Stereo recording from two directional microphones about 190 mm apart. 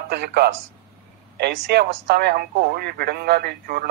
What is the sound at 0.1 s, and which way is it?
Speech, 55° right (ahead or behind).